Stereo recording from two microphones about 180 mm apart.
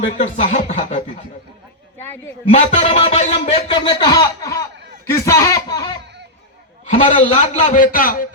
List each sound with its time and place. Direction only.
0.2 s speech: 40° left (ahead or behind)
2.5 s speech: 40° left (ahead or behind); by 6.0 s 20° left (ahead or behind)
6.8 s a man's voice: 40° left (ahead or behind)